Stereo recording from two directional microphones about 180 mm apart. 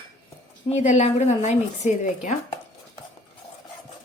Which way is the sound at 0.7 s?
40° left (ahead or behind).